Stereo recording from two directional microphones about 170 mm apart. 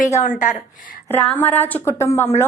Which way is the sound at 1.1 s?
10° left (ahead or behind).